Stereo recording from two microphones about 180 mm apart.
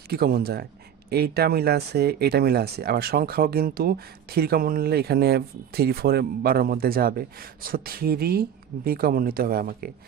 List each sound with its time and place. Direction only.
0.1 s speech: 60° right (ahead or behind)